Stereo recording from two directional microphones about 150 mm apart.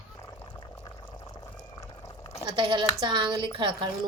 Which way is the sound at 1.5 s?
25° left (ahead or behind).